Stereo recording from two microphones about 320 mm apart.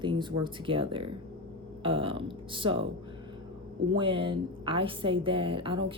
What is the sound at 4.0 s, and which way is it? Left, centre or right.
A woman's voice, centre.